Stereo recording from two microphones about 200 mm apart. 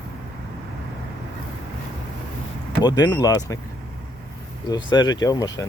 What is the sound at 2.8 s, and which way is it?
Speech, 20° left (ahead or behind).